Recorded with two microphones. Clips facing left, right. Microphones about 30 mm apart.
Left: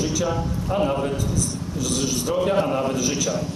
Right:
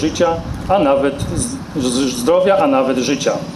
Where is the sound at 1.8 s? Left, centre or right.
Right.